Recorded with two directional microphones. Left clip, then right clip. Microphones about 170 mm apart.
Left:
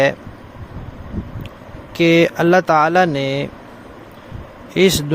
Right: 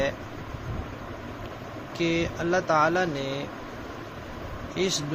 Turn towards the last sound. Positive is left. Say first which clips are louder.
# left 13 dB
turn(degrees=85)